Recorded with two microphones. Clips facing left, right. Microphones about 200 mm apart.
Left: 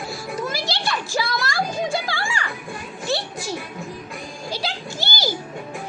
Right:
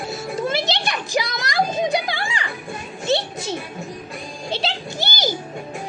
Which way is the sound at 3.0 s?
20° right (ahead or behind).